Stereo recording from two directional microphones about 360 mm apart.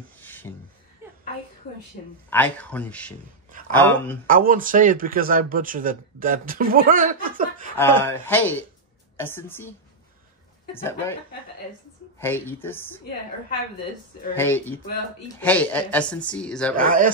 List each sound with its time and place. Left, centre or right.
0.2 s beatboxing: centre
2.2 s speech: centre
4.3 s speech: right
7.7 s a woman's voice: centre
12.2 s speech: centre
14.3 s speech: centre
16.7 s speech: right